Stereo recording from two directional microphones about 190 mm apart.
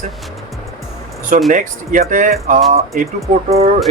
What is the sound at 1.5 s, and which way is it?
Speech, 45° right (ahead or behind).